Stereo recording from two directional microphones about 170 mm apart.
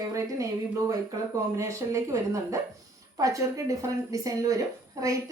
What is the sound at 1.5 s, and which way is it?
Speech, 15° right (ahead or behind).